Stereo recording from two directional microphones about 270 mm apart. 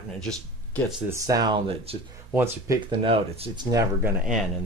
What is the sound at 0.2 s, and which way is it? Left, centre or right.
Speech, centre.